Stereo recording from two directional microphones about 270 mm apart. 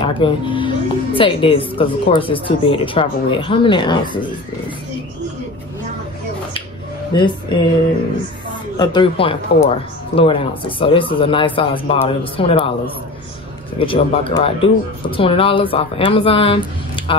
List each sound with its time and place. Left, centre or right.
0.0 s speech: centre
8.7 s speech: centre